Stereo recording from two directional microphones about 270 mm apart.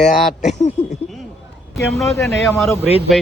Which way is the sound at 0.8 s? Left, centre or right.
Left.